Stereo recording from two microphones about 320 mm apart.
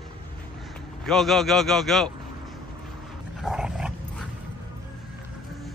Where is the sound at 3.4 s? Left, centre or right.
Centre.